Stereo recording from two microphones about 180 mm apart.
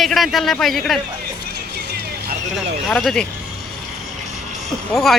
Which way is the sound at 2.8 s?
Centre (ahead or behind).